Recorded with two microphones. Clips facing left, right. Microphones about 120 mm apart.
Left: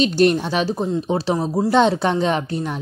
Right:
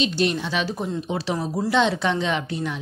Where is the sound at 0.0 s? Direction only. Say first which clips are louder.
Left 6 dB; 45° left (ahead or behind); by 1.7 s 30° left (ahead or behind).